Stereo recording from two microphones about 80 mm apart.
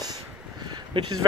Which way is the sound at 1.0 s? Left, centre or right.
Right.